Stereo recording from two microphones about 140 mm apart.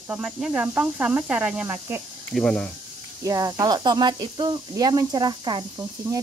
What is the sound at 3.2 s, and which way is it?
Speech, 25° right (ahead or behind).